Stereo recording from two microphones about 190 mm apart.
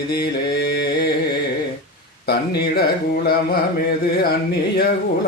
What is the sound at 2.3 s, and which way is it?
Speech, 55° left (ahead or behind).